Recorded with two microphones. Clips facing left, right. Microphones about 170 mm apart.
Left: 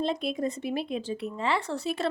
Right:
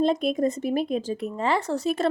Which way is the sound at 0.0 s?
45° right (ahead or behind).